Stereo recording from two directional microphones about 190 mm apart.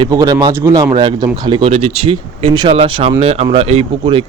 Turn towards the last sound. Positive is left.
turn(degrees=-30)  # may be behind; listen again after turning